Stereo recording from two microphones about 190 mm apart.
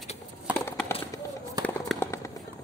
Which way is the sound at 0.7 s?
15° left (ahead or behind).